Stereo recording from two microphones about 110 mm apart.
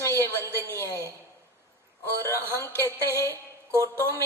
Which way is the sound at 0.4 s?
25° right (ahead or behind).